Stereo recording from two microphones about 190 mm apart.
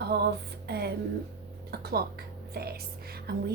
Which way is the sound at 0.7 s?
60° right (ahead or behind).